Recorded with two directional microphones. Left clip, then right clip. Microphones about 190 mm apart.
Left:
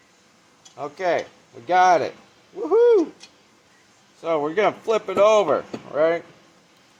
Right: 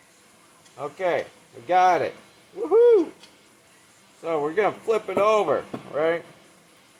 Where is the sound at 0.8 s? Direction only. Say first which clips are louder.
Left 2 dB; 30° left (ahead or behind).